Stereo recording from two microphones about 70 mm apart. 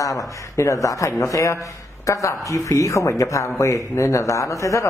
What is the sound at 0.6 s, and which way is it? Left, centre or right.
Speech, left.